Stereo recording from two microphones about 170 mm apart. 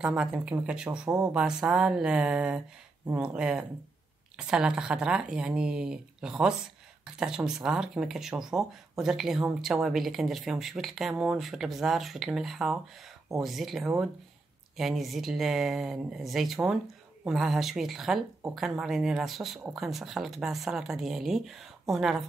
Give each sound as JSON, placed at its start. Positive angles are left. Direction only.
{"t": 0.0, "sound": "speech", "side_deg": -5}